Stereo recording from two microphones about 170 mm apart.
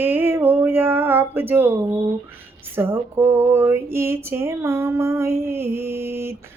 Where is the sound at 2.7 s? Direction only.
15° right (ahead or behind).